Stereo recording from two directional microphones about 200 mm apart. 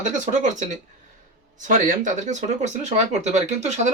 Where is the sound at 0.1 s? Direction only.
40° right (ahead or behind).